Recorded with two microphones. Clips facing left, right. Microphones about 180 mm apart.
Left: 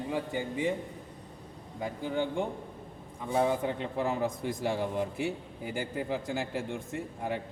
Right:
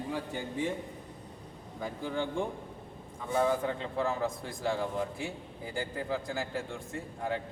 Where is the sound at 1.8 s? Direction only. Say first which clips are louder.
Left 2 dB; 20° left (ahead or behind).